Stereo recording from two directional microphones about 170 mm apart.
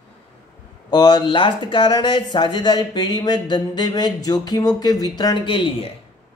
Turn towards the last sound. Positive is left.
turn(degrees=30)  # may be behind; listen again after turning